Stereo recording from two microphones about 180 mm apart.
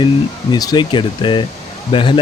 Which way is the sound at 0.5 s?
25° left (ahead or behind).